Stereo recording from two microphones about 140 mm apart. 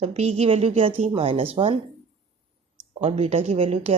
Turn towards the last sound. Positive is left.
turn(degrees=-45)  # may be behind; listen again after turning